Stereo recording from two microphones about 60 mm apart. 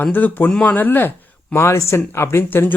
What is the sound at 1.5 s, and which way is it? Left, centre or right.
Speech, left.